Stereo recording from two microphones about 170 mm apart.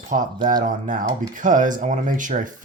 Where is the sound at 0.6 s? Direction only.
50° right (ahead or behind).